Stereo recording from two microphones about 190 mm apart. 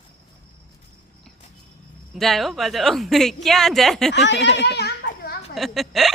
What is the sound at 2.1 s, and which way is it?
A woman's voice, centre (ahead or behind).